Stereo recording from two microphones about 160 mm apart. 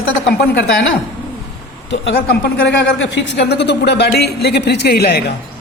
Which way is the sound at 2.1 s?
90° left.